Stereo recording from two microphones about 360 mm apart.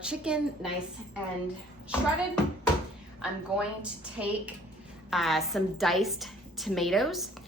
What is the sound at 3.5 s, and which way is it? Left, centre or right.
A woman's voice, centre.